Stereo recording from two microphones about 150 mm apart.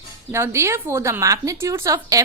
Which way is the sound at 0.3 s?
15° right (ahead or behind).